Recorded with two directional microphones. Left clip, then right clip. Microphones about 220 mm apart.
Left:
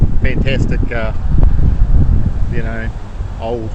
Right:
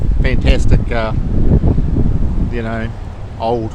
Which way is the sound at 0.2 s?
25° right (ahead or behind).